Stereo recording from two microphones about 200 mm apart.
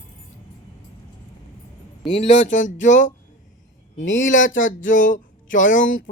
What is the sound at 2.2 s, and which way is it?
Speech, 35° left (ahead or behind).